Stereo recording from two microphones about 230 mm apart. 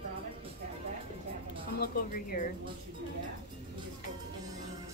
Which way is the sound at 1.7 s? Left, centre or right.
Left.